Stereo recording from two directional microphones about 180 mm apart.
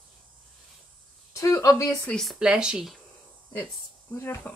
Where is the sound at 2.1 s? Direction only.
Centre (ahead or behind).